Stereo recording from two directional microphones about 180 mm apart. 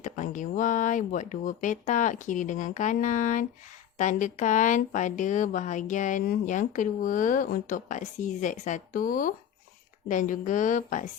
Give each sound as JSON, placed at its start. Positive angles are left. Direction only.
{"t": 0.0, "sound": "a woman's voice", "side_deg": 45}